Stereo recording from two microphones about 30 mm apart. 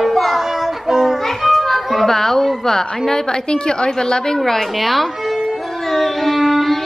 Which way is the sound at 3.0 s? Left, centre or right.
Centre.